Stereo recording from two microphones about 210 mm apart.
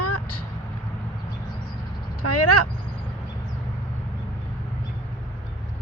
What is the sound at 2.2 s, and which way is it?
Vehicle, 90° left.